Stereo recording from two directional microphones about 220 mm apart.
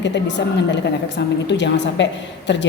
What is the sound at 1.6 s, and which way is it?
Speech, 55° left (ahead or behind).